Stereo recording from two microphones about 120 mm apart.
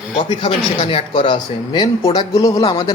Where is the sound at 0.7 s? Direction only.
50° left (ahead or behind).